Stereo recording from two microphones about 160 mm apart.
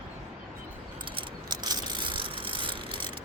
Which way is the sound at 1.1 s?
25° right (ahead or behind).